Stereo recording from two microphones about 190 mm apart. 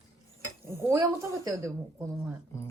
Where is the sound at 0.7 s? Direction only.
15° right (ahead or behind).